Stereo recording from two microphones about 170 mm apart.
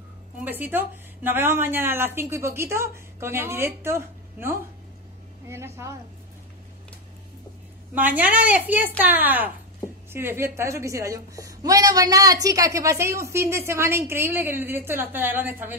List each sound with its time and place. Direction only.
0.4 s a woman's voice: 10° right (ahead or behind)
7.9 s a woman's voice: 10° right (ahead or behind)